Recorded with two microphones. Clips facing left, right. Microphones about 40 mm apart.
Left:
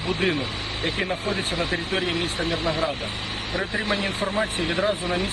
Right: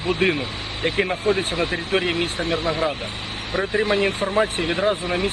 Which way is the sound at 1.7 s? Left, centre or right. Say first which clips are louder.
Right 3 dB; right.